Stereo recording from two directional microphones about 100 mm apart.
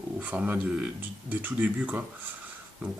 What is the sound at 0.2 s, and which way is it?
Speech, 15° right (ahead or behind).